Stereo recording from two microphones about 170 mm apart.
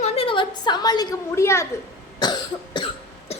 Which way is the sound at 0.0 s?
30° left (ahead or behind).